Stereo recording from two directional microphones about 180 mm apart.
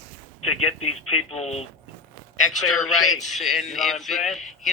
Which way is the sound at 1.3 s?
35° left (ahead or behind).